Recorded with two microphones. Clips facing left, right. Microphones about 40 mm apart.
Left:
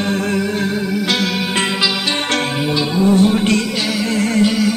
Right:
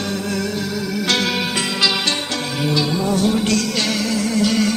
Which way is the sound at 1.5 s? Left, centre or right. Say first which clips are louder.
Left 4 dB; left.